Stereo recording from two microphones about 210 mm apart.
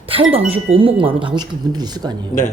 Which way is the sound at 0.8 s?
25° right (ahead or behind).